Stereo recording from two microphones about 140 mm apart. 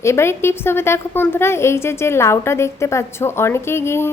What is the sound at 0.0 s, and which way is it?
A woman's voice, 20° left (ahead or behind).